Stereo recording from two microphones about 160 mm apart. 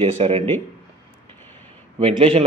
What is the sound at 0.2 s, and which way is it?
Speech, 35° right (ahead or behind).